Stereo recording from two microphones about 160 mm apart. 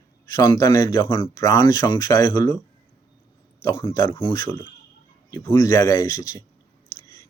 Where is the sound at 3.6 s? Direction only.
20° left (ahead or behind).